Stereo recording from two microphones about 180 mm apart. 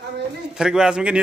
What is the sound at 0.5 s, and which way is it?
Speech, 5° right (ahead or behind).